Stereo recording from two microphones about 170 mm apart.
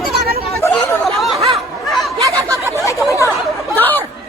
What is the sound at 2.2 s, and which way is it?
Snicker, 20° right (ahead or behind).